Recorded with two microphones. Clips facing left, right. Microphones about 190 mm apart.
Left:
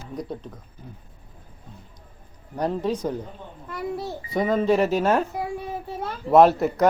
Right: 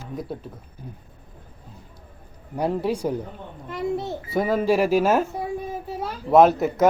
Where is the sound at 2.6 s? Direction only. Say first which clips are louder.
Right 1 dB; 10° right (ahead or behind).